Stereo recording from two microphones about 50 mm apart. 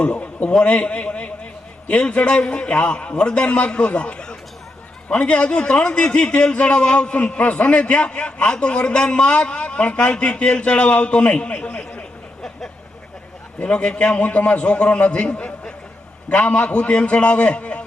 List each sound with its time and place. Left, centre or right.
0.0 s a man's voice: left
13.6 s a man's voice: left